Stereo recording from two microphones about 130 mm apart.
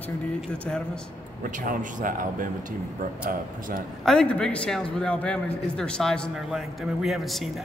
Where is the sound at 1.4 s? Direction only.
80° right.